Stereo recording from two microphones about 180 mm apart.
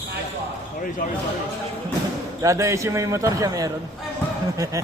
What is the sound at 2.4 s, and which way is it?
A man's voice, 15° right (ahead or behind).